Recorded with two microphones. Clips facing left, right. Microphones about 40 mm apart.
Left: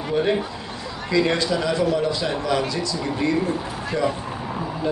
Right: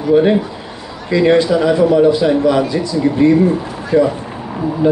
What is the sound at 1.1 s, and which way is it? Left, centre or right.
A man's voice, right.